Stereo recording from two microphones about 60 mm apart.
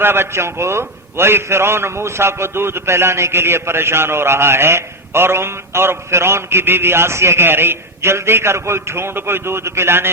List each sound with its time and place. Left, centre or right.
0.0 s a man's voice: right